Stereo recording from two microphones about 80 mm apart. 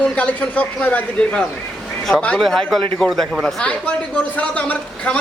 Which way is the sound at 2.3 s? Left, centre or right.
Centre.